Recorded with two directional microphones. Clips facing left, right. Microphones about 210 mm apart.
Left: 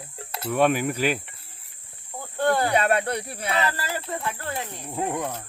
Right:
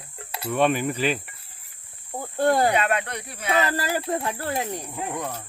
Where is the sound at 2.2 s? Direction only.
40° right (ahead or behind).